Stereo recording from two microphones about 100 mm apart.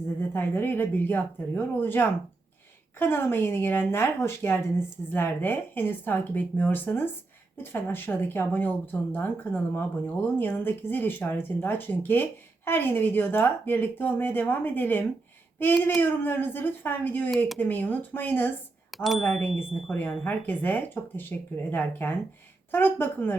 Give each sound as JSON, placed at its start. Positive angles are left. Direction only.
{"t": 0.2, "sound": "speech", "side_deg": 20}
{"t": 18.9, "sound": "speech", "side_deg": 0}
{"t": 20.0, "sound": "speech", "side_deg": 15}